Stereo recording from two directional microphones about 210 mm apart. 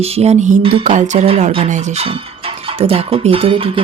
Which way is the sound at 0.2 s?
35° right (ahead or behind).